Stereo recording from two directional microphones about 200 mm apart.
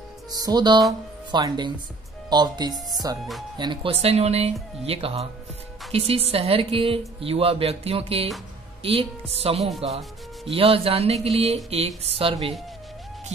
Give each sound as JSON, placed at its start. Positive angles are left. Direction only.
{"t": 0.3, "sound": "a woman's voice", "side_deg": -20}